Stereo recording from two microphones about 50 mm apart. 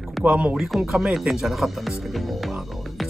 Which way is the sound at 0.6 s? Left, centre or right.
Centre.